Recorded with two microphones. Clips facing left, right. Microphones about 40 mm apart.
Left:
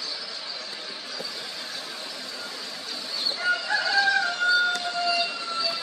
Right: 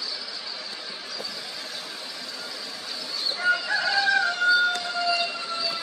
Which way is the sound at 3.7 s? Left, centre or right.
Centre.